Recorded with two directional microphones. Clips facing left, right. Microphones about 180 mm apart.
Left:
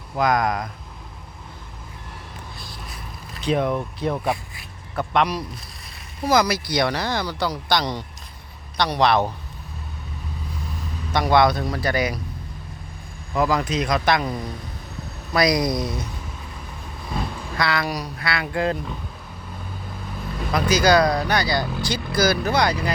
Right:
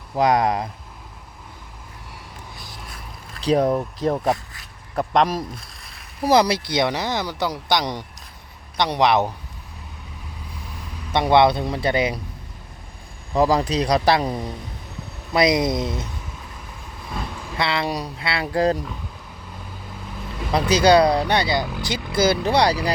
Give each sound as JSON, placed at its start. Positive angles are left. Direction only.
{"t": 0.2, "sound": "speech", "side_deg": -30}
{"t": 3.4, "sound": "speech", "side_deg": -40}
{"t": 6.2, "sound": "a man's voice", "side_deg": -30}
{"t": 11.1, "sound": "speech", "side_deg": -25}
{"t": 13.3, "sound": "speech", "side_deg": -30}
{"t": 17.6, "sound": "speech", "side_deg": -25}
{"t": 20.5, "sound": "speech", "side_deg": -30}